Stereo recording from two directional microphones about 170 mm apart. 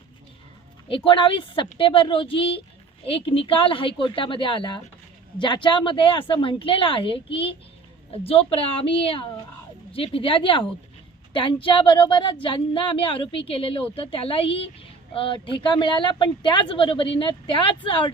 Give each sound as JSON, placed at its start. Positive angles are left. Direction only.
{"t": 0.9, "sound": "a woman's voice", "side_deg": 30}